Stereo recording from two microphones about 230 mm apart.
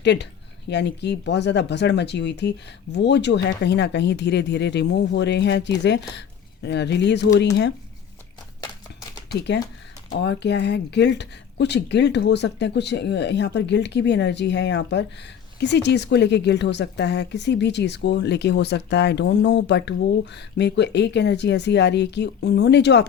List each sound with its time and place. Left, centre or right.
0.0 s a woman's voice: left
8.6 s a sound: centre
10.2 s a woman's voice: left